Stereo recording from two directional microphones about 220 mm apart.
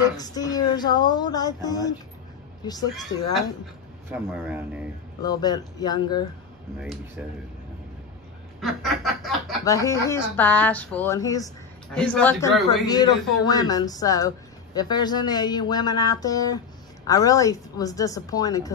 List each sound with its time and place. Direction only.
0.2 s speech: 15° left (ahead or behind)
3.1 s speech: 60° left (ahead or behind)
4.1 s speech: 10° right (ahead or behind)
5.2 s speech: 20° left (ahead or behind)
6.8 s a man's voice: 5° right (ahead or behind)
8.5 s snicker: centre (ahead or behind)
9.7 s speech: 15° left (ahead or behind)
11.9 s a man's voice: 5° left (ahead or behind)
12.8 s speech: 20° left (ahead or behind)